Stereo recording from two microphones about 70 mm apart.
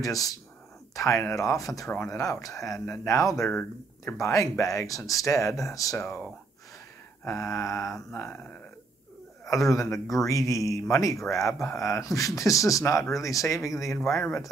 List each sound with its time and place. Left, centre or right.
0.0 s speech: left
0.9 s speech: left
7.2 s speech: left
8.1 s speech: left
9.4 s speech: left